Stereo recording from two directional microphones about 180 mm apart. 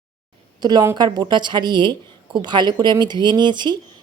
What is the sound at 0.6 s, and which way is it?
A woman's voice, 20° right (ahead or behind).